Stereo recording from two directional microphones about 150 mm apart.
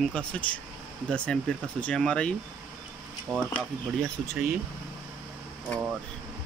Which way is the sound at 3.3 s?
25° right (ahead or behind).